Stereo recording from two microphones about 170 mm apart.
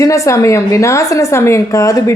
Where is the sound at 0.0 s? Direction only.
20° left (ahead or behind).